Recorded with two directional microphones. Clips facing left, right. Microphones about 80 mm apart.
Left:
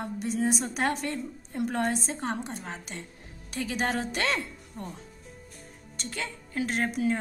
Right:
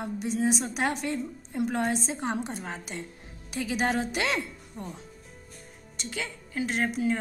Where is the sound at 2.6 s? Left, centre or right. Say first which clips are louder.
Right 2 dB; right.